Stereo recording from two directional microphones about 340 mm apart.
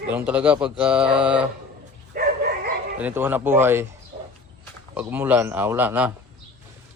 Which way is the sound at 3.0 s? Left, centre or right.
Centre.